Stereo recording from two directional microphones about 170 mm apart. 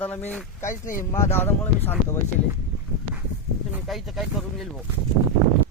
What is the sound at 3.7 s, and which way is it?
Speech, centre (ahead or behind).